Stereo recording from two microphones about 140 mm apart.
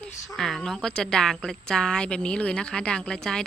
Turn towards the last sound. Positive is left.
turn(degrees=5)  # may be behind; listen again after turning